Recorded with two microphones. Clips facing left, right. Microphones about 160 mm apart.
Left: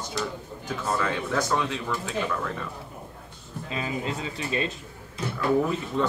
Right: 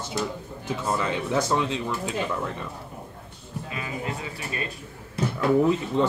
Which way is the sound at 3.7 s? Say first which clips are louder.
Left 3 dB; 25° left (ahead or behind).